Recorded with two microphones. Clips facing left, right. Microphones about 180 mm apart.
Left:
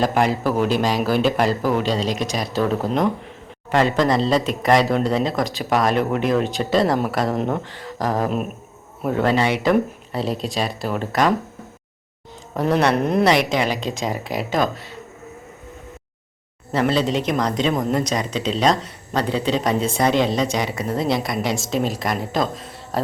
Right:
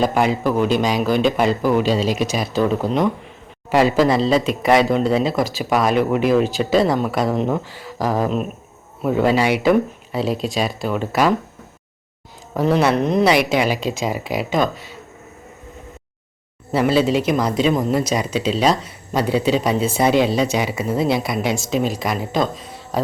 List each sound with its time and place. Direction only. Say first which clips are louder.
0.0 s speech: right 1 dB; centre (ahead or behind)
12.5 s speech: right 2 dB; centre (ahead or behind)
16.7 s speech: right 3 dB; 5° right (ahead or behind)